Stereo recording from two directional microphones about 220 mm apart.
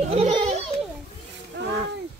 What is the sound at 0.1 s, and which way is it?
Children playing, 30° right (ahead or behind).